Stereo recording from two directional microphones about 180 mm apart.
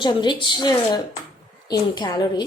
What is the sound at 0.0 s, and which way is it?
Speech, 25° left (ahead or behind).